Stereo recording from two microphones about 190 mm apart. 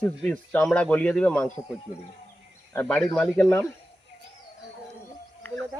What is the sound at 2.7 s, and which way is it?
A man's voice, 5° left (ahead or behind).